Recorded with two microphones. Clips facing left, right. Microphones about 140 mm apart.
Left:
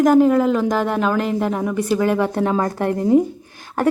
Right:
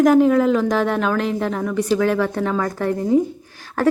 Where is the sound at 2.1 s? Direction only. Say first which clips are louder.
Left 2 dB; 20° left (ahead or behind).